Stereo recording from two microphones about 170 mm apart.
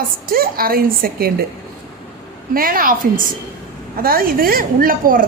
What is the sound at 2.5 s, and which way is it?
Speech, 55° right (ahead or behind).